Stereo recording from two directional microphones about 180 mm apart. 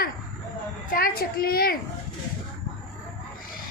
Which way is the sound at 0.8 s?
50° left (ahead or behind).